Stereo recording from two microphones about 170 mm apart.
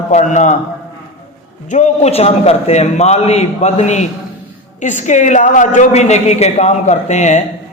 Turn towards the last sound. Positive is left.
turn(degrees=45)  # may be behind; listen again after turning